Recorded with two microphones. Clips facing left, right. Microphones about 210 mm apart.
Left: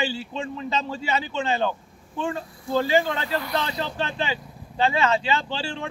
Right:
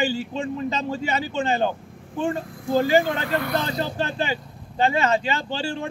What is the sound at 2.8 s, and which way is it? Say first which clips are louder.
A man's voice: right 2 dB; 45° right (ahead or behind).